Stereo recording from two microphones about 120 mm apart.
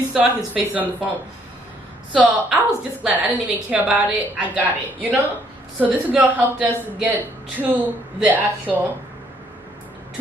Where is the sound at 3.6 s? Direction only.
10° right (ahead or behind).